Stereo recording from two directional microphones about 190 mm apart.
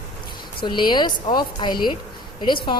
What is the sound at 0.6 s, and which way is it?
A woman's voice, 25° left (ahead or behind).